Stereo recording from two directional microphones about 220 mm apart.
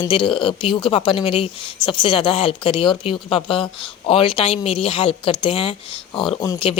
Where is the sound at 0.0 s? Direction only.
20° left (ahead or behind).